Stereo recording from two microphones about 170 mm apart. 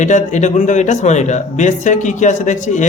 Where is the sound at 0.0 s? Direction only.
45° left (ahead or behind).